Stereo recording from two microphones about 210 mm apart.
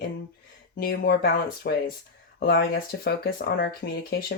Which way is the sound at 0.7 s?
45° left (ahead or behind).